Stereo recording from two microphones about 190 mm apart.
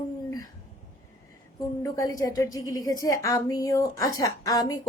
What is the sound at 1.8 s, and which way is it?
A woman's voice, 20° left (ahead or behind).